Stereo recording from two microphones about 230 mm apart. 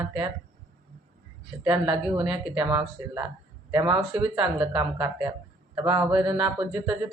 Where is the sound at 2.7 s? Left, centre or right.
Right.